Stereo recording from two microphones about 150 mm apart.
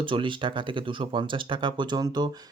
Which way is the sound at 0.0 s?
35° right (ahead or behind).